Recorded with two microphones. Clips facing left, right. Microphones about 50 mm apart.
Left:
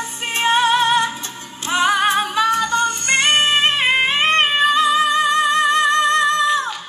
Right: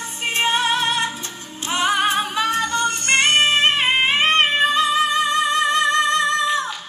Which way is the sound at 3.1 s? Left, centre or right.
Left.